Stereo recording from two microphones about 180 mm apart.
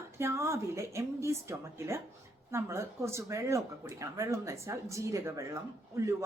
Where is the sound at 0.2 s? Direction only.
15° right (ahead or behind).